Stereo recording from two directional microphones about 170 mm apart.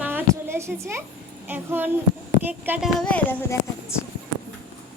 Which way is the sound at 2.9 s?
10° left (ahead or behind).